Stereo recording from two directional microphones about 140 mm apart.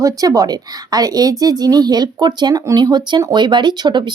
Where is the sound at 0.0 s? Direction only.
25° right (ahead or behind).